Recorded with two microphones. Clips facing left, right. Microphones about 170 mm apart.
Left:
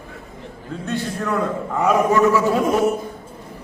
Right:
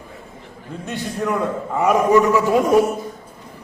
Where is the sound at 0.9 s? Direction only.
10° right (ahead or behind).